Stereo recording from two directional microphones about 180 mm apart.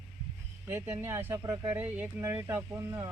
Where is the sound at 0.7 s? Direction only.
15° right (ahead or behind).